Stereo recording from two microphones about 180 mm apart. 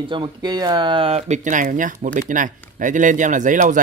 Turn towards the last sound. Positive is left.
turn(degrees=-45)  # may be behind; listen again after turning